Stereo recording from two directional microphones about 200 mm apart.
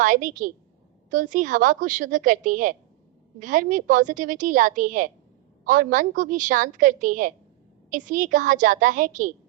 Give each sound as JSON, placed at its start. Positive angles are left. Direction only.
{"t": 0.0, "sound": "a woman's voice", "side_deg": -40}